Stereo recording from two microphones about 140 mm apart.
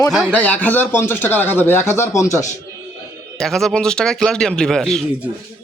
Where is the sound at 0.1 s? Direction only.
5° right (ahead or behind).